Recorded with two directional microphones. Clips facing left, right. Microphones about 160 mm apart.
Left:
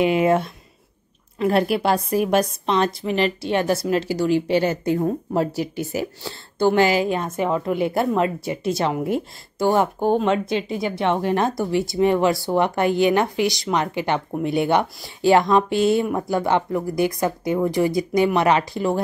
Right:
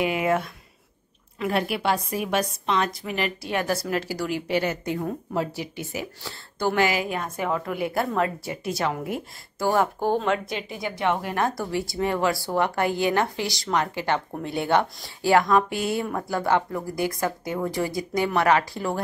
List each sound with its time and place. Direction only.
0.0 s a woman's voice: 25° left (ahead or behind)
6.2 s a woman's voice: 25° left (ahead or behind)